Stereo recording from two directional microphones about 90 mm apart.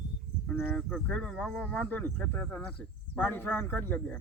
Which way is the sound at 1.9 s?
20° left (ahead or behind).